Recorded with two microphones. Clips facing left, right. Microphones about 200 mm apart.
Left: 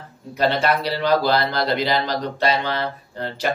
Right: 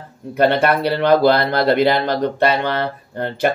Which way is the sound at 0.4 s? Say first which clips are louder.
Right 5 dB; 55° right (ahead or behind).